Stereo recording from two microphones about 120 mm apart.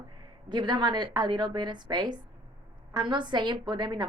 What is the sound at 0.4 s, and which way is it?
A woman's voice, 40° right (ahead or behind).